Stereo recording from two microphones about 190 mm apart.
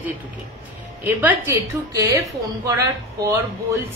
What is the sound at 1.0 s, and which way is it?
A woman's voice, 10° right (ahead or behind).